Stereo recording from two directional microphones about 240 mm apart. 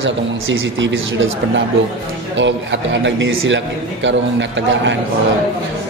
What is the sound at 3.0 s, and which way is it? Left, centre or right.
Speech, right.